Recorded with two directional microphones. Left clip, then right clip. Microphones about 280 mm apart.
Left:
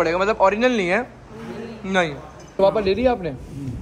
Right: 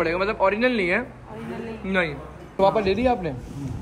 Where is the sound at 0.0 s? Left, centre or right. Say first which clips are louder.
Left 4 dB; centre.